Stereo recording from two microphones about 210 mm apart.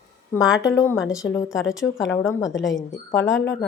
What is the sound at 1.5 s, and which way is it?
Speech, centre (ahead or behind).